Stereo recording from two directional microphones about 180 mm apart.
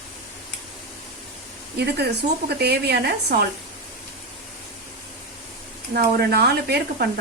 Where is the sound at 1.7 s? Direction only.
65° right (ahead or behind).